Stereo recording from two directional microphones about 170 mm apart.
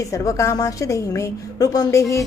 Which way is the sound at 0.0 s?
20° left (ahead or behind).